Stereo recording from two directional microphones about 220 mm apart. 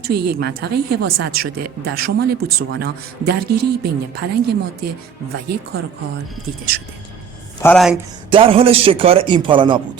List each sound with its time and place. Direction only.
0.1 s speech: 45° right (ahead or behind)
7.6 s speech: 5° left (ahead or behind)
8.3 s a man's voice: 25° right (ahead or behind)